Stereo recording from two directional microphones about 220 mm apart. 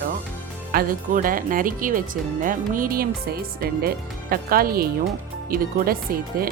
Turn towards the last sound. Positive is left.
turn(degrees=-40)  # may be behind; listen again after turning